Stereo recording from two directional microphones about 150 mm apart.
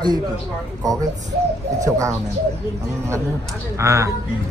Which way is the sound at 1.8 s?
20° right (ahead or behind).